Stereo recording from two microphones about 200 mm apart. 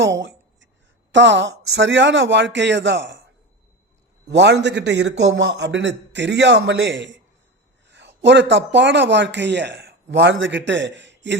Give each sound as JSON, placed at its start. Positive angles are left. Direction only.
{"t": 0.0, "sound": "a sound", "side_deg": -65}
{"t": 1.1, "sound": "a man's voice", "side_deg": -65}
{"t": 4.3, "sound": "a man's voice", "side_deg": -60}